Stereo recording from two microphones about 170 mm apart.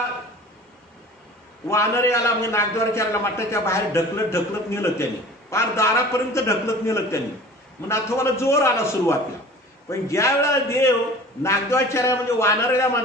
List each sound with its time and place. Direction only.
1.7 s a man's voice: 15° left (ahead or behind)